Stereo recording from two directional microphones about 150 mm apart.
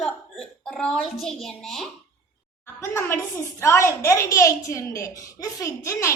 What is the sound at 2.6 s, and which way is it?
A woman's voice, 15° left (ahead or behind).